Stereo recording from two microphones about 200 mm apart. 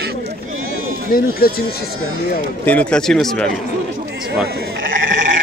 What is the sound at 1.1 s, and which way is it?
Speech, 45° left (ahead or behind).